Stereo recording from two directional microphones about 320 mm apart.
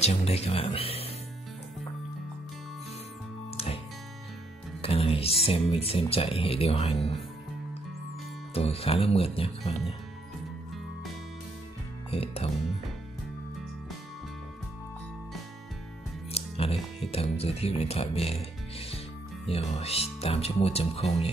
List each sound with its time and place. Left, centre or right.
0.0 s speech: centre
3.5 s music: centre
4.8 s speech: centre
8.5 s speech: centre
12.1 s speech: centre
16.3 s music: centre
17.1 s speech: centre